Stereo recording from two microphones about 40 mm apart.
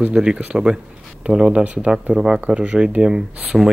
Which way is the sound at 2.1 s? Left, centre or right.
Centre.